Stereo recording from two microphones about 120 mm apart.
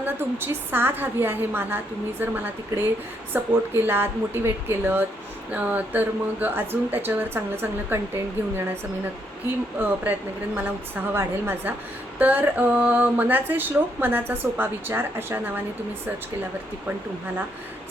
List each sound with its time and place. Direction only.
0.0 s speech: 20° right (ahead or behind)